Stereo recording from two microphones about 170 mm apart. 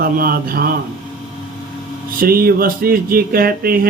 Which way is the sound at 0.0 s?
60° right (ahead or behind).